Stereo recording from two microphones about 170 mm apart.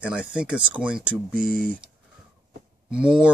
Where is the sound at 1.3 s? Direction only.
55° right (ahead or behind).